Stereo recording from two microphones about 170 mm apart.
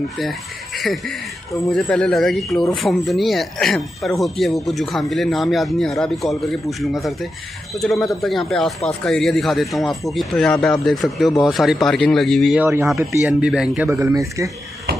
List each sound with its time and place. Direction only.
0.2 s speech: centre (ahead or behind)
12.5 s speech: 15° right (ahead or behind)
13.8 s speech: 15° right (ahead or behind)